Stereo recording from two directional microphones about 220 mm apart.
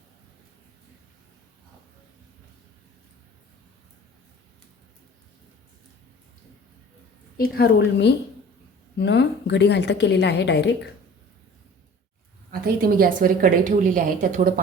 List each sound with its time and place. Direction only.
7.3 s a woman's voice: 45° left (ahead or behind)
12.5 s a woman's voice: 40° right (ahead or behind)